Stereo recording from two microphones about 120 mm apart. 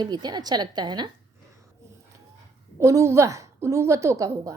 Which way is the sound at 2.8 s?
25° right (ahead or behind).